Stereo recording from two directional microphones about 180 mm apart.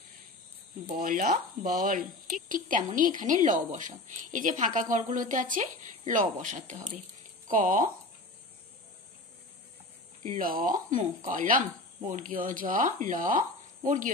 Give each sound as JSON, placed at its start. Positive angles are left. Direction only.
{"t": 0.9, "sound": "speech", "side_deg": -50}
{"t": 10.2, "sound": "speech", "side_deg": -50}